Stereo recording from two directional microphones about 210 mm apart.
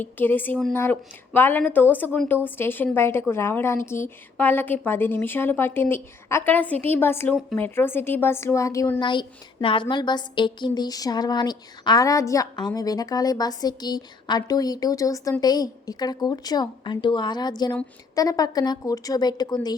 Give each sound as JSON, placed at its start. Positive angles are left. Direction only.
{"t": 0.0, "sound": "a woman's voice", "side_deg": 10}